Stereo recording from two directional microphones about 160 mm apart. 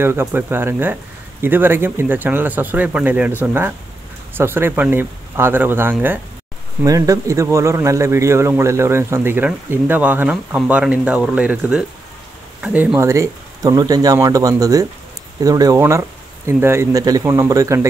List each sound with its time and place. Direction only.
0.0 s a man's voice: 15° right (ahead or behind)